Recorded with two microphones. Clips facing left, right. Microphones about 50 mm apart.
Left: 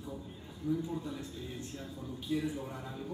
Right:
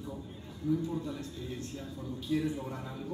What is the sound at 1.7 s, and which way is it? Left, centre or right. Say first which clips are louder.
Speech: right 2 dB; centre.